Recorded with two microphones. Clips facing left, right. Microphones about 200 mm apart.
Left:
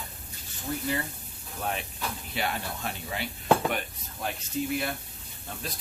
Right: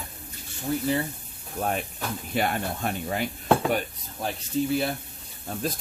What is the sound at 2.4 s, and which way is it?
Speech, 50° right (ahead or behind).